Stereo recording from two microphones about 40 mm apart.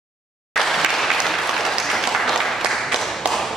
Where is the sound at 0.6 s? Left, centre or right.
Centre.